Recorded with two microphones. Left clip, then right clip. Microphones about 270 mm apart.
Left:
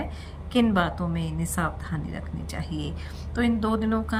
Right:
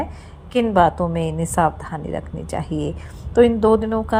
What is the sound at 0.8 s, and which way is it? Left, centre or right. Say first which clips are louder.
Speech: right 11 dB; centre.